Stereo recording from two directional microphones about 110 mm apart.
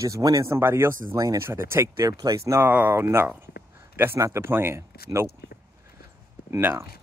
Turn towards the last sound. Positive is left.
turn(degrees=-20)  # may be behind; listen again after turning